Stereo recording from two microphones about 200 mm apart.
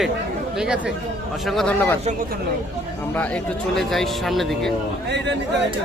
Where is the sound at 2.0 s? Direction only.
35° right (ahead or behind).